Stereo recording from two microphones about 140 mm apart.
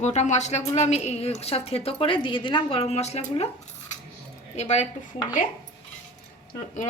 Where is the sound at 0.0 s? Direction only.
55° left (ahead or behind).